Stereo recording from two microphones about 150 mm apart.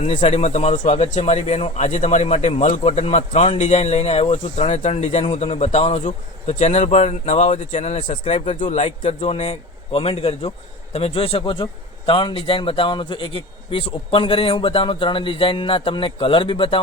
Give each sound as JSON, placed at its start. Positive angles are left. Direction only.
{"t": 0.0, "sound": "speech", "side_deg": 45}
{"t": 9.0, "sound": "speech", "side_deg": 45}